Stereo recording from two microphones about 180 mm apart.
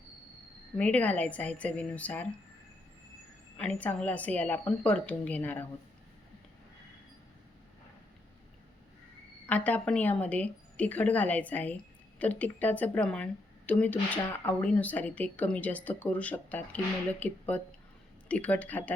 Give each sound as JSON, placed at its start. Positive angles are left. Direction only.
{"t": 0.8, "sound": "speech", "side_deg": 10}
{"t": 3.6, "sound": "speech", "side_deg": 10}
{"t": 9.5, "sound": "speech", "side_deg": 10}